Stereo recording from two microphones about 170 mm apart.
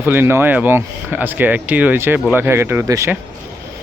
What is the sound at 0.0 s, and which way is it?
Speech, 10° right (ahead or behind).